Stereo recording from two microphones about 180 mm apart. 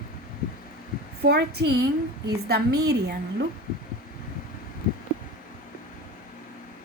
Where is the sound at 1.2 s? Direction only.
65° right (ahead or behind).